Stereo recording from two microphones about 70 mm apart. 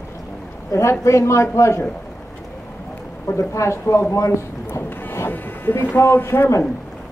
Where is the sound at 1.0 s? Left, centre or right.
Left.